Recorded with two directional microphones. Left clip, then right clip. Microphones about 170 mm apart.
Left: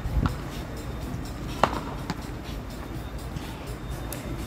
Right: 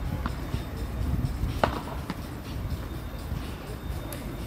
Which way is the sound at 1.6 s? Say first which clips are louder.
Left 3 dB; 90° left.